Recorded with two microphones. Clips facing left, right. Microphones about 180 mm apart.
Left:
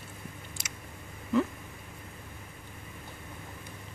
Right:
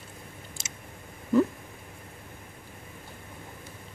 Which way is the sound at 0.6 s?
25° right (ahead or behind).